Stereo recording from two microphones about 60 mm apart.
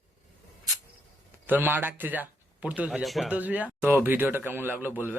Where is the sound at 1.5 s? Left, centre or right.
Right.